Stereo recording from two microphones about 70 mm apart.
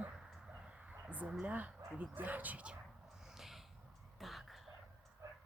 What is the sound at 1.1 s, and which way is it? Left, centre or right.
Speech, right.